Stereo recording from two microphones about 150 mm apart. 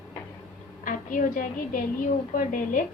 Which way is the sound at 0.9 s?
65° left (ahead or behind).